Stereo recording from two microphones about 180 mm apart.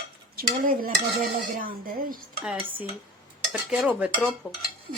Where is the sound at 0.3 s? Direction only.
55° right (ahead or behind).